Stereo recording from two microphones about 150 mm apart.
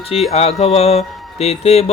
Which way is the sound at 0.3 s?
45° left (ahead or behind).